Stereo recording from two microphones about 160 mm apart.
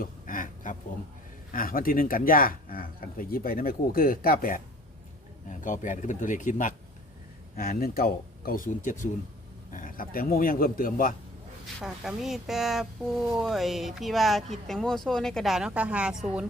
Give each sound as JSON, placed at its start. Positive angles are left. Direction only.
{"t": 0.0, "sound": "a sound", "side_deg": 55}
{"t": 1.5, "sound": "speech", "side_deg": 60}
{"t": 5.5, "sound": "speech", "side_deg": 50}
{"t": 7.5, "sound": "speech", "side_deg": 65}
{"t": 11.8, "sound": "speech", "side_deg": -5}